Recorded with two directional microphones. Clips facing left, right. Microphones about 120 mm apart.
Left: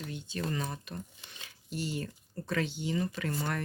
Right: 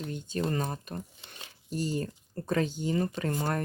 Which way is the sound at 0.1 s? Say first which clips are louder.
Right 5 dB; 45° right (ahead or behind).